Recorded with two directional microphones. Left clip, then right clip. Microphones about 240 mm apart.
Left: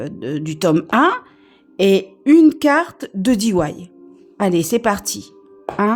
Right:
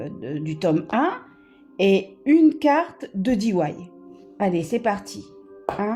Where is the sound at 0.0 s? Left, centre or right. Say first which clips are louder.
Left 6 dB; left.